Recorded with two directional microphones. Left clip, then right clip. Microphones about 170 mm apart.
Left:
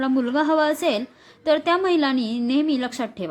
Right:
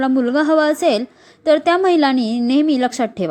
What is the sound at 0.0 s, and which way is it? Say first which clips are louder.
A woman's voice: right 5 dB; 25° right (ahead or behind).